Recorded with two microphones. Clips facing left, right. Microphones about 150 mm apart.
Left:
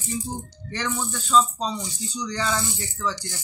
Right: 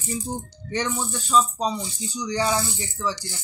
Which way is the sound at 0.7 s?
15° right (ahead or behind).